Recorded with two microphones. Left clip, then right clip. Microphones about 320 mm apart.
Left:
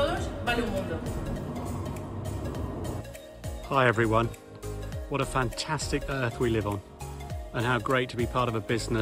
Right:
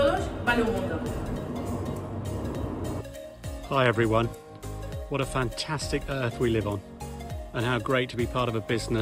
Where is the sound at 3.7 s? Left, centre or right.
Centre.